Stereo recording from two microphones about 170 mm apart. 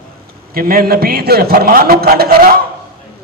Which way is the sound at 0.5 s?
60° right (ahead or behind).